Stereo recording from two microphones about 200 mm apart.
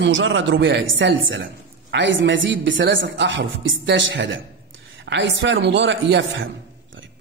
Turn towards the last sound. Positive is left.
turn(degrees=-70)  # may be behind; listen again after turning